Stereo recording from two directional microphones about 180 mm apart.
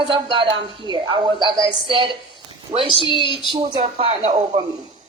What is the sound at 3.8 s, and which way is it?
Speech, 30° right (ahead or behind).